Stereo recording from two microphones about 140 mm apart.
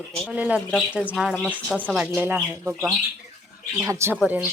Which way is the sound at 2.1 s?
15° right (ahead or behind).